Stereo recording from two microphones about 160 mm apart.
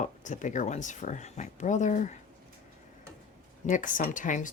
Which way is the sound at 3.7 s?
55° left (ahead or behind).